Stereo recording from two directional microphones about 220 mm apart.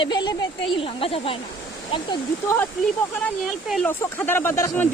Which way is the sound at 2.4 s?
10° left (ahead or behind).